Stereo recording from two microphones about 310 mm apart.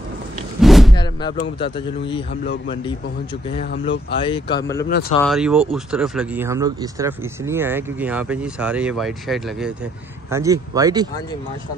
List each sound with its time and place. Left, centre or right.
0.6 s a sound: centre
1.4 s a man's voice: centre
3.7 s speech: left
4.2 s a man's voice: centre